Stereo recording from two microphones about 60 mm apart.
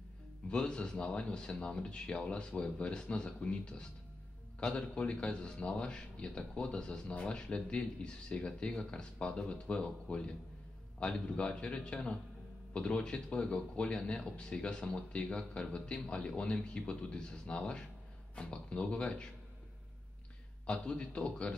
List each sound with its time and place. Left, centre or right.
0.5 s a man's voice: centre
20.7 s speech: centre